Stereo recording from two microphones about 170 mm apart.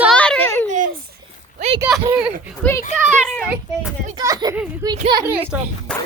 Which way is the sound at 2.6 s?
15° left (ahead or behind).